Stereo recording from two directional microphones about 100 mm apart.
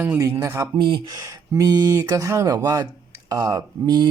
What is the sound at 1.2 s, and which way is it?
Speech, 35° right (ahead or behind).